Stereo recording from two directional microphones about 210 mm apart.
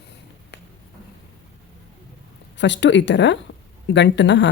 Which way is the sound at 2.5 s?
60° left (ahead or behind).